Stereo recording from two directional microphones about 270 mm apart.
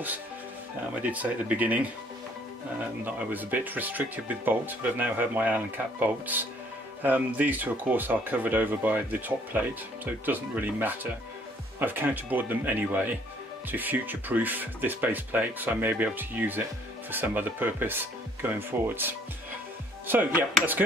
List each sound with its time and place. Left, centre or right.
1.1 s speech: centre
3.1 s speech: centre